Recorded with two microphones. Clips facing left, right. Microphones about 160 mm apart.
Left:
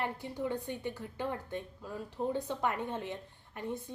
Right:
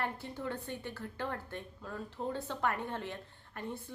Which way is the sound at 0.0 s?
15° left (ahead or behind).